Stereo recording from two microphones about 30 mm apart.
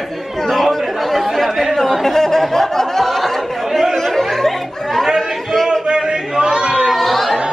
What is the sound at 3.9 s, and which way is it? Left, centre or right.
Chatter, centre.